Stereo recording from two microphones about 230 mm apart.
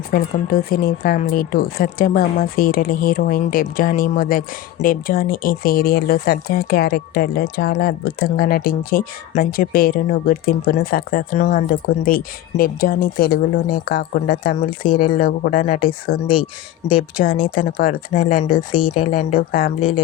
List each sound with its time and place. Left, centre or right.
0.1 s speech: left
17.4 s speech: left